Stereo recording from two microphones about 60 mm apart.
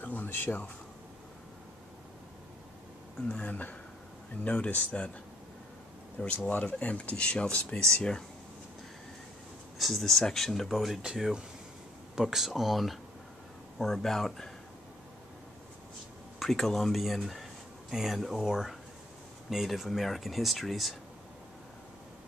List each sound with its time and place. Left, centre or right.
0.0 s speech: left
3.4 s speech: left
6.1 s speech: left
9.8 s speech: centre
16.3 s speech: centre